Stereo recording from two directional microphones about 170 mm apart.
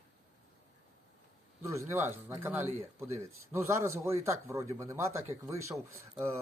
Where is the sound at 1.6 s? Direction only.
15° right (ahead or behind).